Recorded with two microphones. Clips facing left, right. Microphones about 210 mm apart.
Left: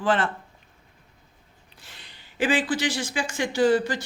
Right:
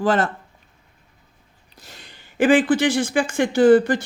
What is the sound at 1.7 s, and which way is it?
Speech, 40° right (ahead or behind).